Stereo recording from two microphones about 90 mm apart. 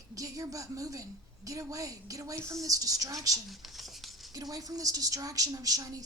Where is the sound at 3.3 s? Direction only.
Centre (ahead or behind).